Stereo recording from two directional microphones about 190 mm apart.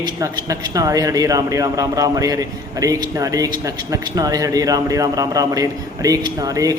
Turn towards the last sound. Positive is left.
turn(degrees=-20)  # may be behind; listen again after turning